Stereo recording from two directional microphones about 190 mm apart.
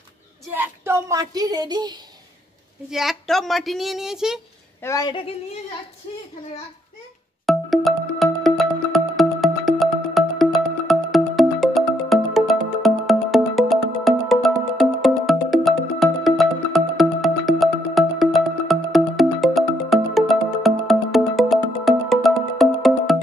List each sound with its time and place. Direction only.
0.5 s a sound: 10° right (ahead or behind)
2.9 s a woman's voice: centre (ahead or behind)
4.8 s speech: 20° left (ahead or behind)
7.4 s music: centre (ahead or behind)